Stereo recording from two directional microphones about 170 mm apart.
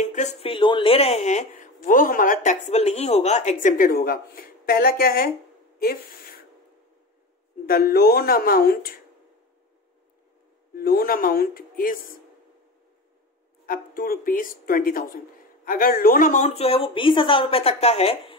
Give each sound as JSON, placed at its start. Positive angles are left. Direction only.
{"t": 0.0, "sound": "a woman's voice", "side_deg": 45}
{"t": 7.6, "sound": "speech", "side_deg": 65}
{"t": 10.7, "sound": "speech", "side_deg": 65}
{"t": 13.7, "sound": "a woman's voice", "side_deg": 60}